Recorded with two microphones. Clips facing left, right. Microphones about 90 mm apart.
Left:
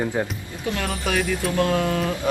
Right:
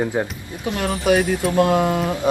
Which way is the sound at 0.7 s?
20° right (ahead or behind).